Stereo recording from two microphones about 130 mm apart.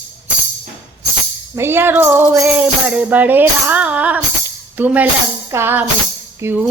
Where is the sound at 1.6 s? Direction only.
15° right (ahead or behind).